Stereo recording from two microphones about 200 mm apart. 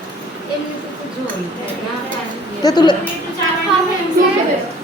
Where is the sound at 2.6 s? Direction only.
20° left (ahead or behind).